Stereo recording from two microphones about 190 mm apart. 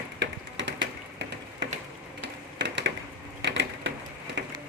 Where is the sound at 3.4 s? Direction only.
70° right (ahead or behind).